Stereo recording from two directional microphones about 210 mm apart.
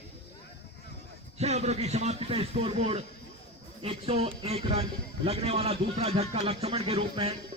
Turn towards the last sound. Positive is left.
turn(degrees=-30)  # may be behind; listen again after turning